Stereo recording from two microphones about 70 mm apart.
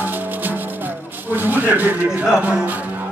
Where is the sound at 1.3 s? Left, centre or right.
Right.